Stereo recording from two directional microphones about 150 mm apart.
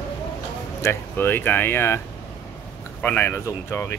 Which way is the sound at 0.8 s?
15° left (ahead or behind).